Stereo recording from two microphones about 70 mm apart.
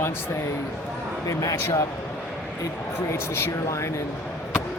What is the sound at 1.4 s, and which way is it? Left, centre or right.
Speech, left.